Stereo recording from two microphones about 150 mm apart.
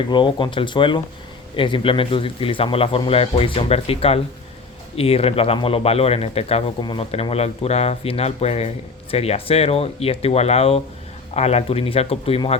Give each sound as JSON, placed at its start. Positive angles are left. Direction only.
{"t": 0.1, "sound": "speech", "side_deg": 30}
{"t": 7.1, "sound": "speech", "side_deg": 45}